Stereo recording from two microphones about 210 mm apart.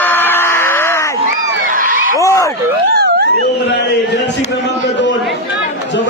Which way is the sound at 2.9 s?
50° right (ahead or behind).